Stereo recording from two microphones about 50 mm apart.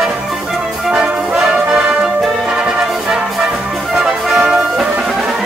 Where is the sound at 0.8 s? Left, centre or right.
Centre.